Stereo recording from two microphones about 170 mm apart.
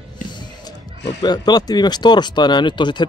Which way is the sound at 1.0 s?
25° left (ahead or behind).